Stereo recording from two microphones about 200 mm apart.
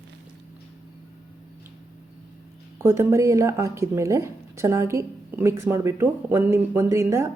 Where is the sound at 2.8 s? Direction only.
10° right (ahead or behind).